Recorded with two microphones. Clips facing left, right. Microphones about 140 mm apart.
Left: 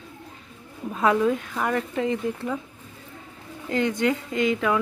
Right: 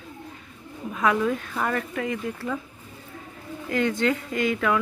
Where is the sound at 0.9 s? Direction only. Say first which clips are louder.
Left 2 dB; 25° left (ahead or behind).